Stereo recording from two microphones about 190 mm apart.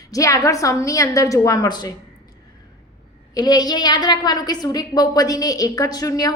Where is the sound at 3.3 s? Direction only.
20° left (ahead or behind).